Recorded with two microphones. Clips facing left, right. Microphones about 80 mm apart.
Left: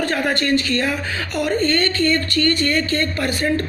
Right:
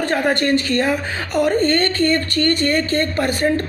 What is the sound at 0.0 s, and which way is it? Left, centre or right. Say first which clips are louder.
Speech: right 2 dB; right.